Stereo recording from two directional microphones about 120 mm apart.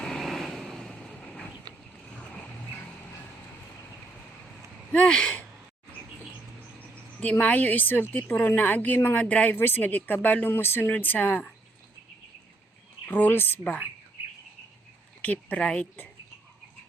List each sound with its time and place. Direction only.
0.0 s vehicle: centre (ahead or behind)
1.7 s boat: 35° right (ahead or behind)
2.1 s boat: 10° left (ahead or behind)
4.9 s speech: 10° left (ahead or behind)
7.2 s a woman's voice: 10° left (ahead or behind)
13.1 s a woman's voice: 15° left (ahead or behind)
15.2 s a woman's voice: 10° left (ahead or behind)